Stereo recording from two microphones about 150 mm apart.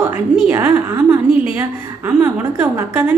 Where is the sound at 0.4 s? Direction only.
10° right (ahead or behind).